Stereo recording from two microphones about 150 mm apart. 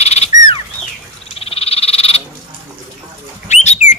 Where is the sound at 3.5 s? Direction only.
50° left (ahead or behind).